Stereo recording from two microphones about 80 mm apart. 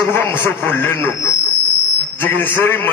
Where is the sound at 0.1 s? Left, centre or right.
Left.